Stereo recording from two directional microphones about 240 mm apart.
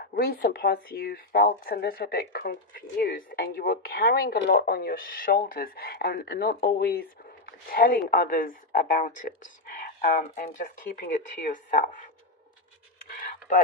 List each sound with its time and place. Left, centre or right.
0.0 s speech: left